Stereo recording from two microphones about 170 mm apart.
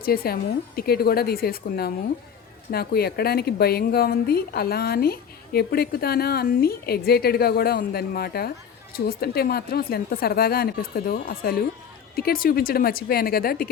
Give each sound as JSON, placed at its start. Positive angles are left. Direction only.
{"t": 0.0, "sound": "speech", "side_deg": 60}